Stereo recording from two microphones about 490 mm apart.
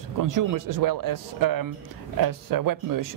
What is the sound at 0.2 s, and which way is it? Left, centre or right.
Speech, right.